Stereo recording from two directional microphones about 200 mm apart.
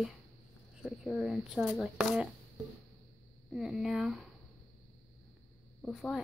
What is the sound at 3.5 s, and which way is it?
Speech, centre (ahead or behind).